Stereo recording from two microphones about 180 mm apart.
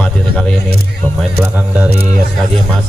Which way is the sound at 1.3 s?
10° right (ahead or behind).